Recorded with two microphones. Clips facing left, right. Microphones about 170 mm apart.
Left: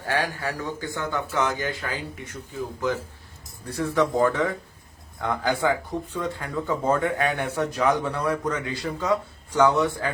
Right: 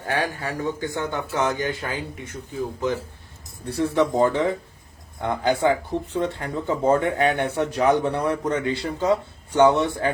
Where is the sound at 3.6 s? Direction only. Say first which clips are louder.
Right 2 dB; 30° right (ahead or behind).